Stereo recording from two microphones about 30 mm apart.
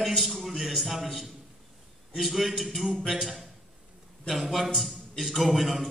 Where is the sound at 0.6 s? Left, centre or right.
Centre.